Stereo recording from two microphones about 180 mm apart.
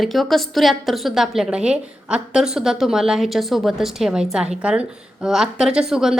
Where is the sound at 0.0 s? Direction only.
Centre (ahead or behind).